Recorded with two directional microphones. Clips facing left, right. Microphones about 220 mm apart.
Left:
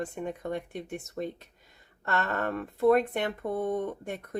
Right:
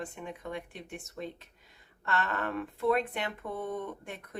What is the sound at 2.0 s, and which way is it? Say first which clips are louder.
Speech: left 3 dB; 40° left (ahead or behind).